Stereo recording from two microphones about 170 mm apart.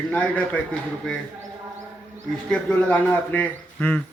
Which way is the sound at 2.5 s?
5° left (ahead or behind).